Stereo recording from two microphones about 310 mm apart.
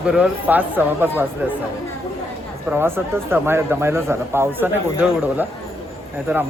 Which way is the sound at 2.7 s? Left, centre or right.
Centre.